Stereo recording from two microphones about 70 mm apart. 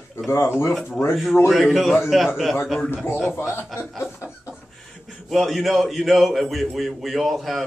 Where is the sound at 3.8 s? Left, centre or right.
Left.